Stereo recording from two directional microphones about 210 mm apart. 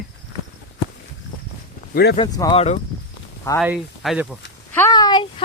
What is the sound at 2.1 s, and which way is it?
Speech, 20° left (ahead or behind).